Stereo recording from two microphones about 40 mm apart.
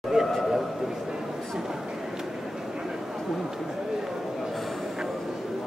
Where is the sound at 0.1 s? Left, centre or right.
Centre.